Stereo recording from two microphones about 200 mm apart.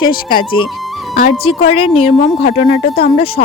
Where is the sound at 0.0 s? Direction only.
25° left (ahead or behind).